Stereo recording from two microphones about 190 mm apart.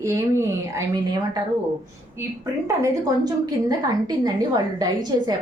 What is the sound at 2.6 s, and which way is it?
A woman's voice, 20° right (ahead or behind).